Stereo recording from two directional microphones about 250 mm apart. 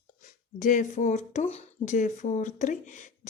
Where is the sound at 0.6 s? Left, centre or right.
Left.